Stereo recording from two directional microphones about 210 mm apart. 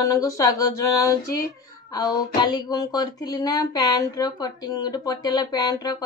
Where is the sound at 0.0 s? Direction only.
15° left (ahead or behind).